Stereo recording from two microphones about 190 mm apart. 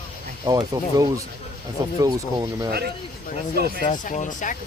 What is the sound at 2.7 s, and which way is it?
Speech, 55° right (ahead or behind).